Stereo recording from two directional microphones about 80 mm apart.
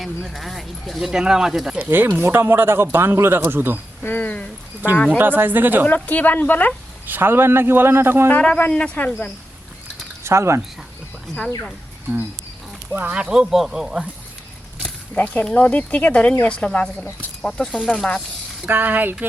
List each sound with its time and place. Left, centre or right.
0.0 s speech: centre
1.8 s speech: right
4.0 s speech: left
5.1 s speech: right
5.9 s speech: centre
7.1 s speech: right
8.3 s speech: centre
10.2 s speech: right
12.9 s speech: centre
13.3 s speech: centre
15.1 s speech: centre
18.6 s speech: right